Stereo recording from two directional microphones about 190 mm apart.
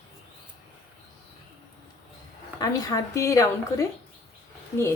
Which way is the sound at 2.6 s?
20° left (ahead or behind).